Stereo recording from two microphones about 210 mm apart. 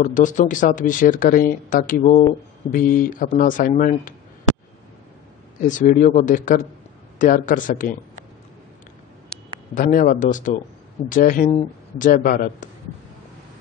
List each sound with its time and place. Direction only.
0.0 s speech: 40° left (ahead or behind)
5.7 s speech: 40° left (ahead or behind)
9.8 s speech: 40° left (ahead or behind)